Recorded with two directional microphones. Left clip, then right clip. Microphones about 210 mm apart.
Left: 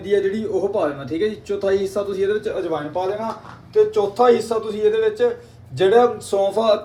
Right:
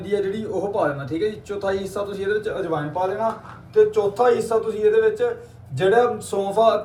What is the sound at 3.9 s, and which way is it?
Speech, 45° left (ahead or behind).